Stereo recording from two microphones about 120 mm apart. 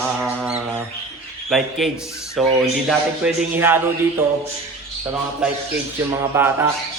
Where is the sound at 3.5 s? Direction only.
20° right (ahead or behind).